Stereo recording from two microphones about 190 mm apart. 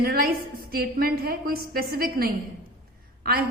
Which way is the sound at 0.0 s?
50° right (ahead or behind).